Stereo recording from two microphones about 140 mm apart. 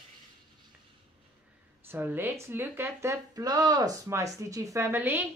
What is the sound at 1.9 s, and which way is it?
Speech, 15° right (ahead or behind).